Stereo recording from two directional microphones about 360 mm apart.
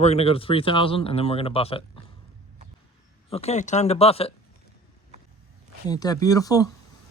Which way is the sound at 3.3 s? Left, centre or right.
Centre.